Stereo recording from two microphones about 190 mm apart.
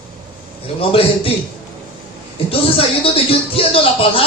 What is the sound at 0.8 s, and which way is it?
Speech, 30° left (ahead or behind).